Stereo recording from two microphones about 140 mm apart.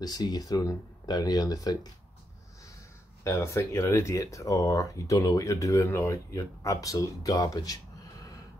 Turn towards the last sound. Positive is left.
turn(degrees=25)  # may be behind; listen again after turning